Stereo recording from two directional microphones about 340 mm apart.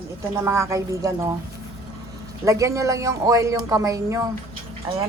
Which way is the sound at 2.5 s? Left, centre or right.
Centre.